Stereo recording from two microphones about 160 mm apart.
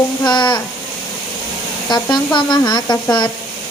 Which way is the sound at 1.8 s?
25° left (ahead or behind).